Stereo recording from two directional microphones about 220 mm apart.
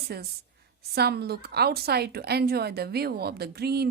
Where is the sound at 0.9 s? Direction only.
45° right (ahead or behind).